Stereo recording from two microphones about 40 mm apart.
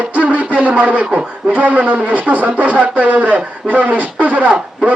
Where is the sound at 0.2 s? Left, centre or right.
Right.